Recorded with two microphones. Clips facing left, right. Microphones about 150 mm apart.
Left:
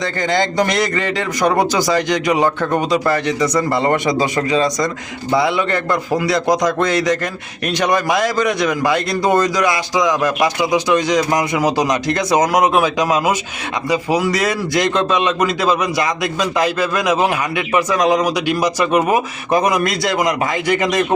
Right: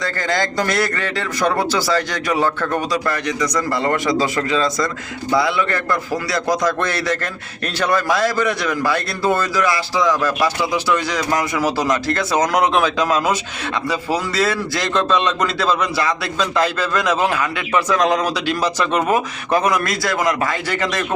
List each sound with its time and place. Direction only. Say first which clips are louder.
0.0 s a man's voice: left 3 dB; 20° left (ahead or behind)
3.1 s a man's voice: left 4 dB; 25° left (ahead or behind)